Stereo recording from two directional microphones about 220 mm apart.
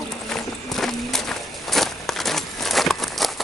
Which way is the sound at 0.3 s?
Centre (ahead or behind).